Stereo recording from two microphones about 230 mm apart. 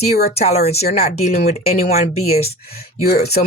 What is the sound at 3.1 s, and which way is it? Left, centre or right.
Speech, left.